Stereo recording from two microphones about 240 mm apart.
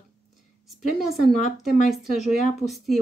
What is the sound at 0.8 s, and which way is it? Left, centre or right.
Speech, centre.